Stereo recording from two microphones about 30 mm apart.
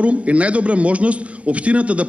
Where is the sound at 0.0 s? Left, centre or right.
Right.